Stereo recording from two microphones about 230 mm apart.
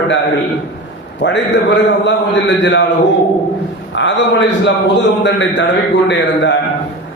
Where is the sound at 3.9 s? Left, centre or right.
Left.